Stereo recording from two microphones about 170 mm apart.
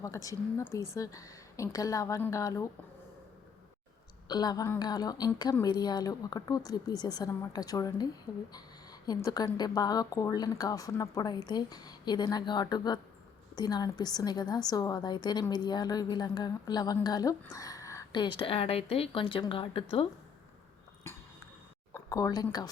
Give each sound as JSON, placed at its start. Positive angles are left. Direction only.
{"t": 0.0, "sound": "a woman's voice", "side_deg": 20}
{"t": 4.3, "sound": "a woman's voice", "side_deg": 25}
{"t": 17.4, "sound": "a sound", "side_deg": 20}
{"t": 18.3, "sound": "speech", "side_deg": 35}
{"t": 21.9, "sound": "speech", "side_deg": 20}